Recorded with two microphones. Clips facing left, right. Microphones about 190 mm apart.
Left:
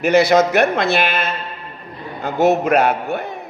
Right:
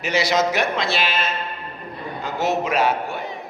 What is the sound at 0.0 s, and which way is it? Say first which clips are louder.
A man's voice: left 7 dB; 55° left (ahead or behind).